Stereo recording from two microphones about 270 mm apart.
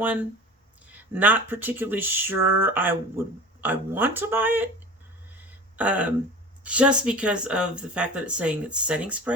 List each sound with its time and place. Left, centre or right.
0.9 s speech: centre
5.7 s speech: centre